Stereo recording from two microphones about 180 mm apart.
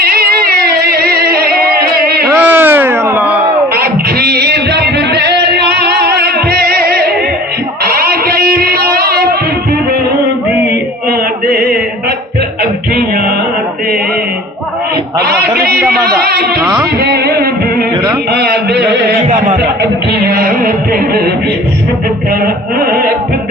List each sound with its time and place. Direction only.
0.0 s music: 55° right (ahead or behind)
2.2 s a sound: 10° right (ahead or behind)
3.8 s a sound: 60° right (ahead or behind)
11.1 s mantra: 55° right (ahead or behind)
12.9 s music: 55° right (ahead or behind)
15.3 s a sound: 60° right (ahead or behind)
16.0 s music: 60° right (ahead or behind)
18.3 s carnatic music: 60° right (ahead or behind)
20.2 s carnatic music: 55° right (ahead or behind)
22.3 s carnatic music: 55° right (ahead or behind)